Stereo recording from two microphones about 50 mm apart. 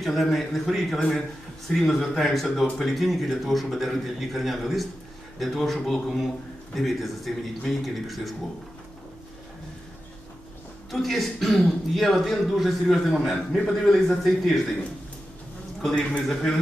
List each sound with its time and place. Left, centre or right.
0.0 s a man's voice: centre
10.9 s a man's voice: centre
15.9 s a man's voice: centre